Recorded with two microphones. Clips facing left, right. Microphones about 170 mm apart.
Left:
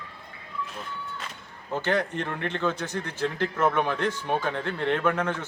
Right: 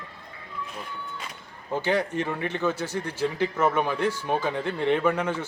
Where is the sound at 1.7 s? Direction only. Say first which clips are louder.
Right 1 dB; 10° right (ahead or behind).